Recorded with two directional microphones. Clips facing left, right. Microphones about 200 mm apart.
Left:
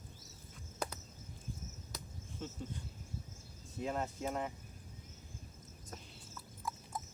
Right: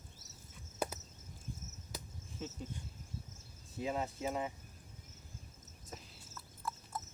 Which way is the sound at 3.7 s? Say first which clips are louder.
Right 1 dB; centre (ahead or behind).